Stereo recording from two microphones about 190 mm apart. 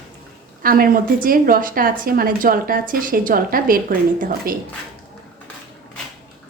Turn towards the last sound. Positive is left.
turn(degrees=-50)  # may be behind; listen again after turning